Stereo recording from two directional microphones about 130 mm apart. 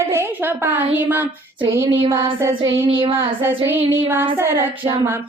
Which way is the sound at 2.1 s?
20° right (ahead or behind).